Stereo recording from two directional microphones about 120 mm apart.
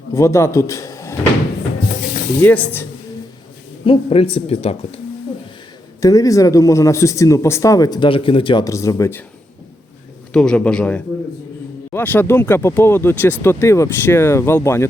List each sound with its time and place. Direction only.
0.1 s speech: 25° left (ahead or behind)
2.4 s a man's voice: 15° left (ahead or behind)
3.8 s speech: 50° left (ahead or behind)
6.0 s speech: 30° left (ahead or behind); by 8.6 s 45° left (ahead or behind)
8.6 s speech: 25° left (ahead or behind)
10.3 s a man's voice: 5° left (ahead or behind); by 14.8 s 20° left (ahead or behind)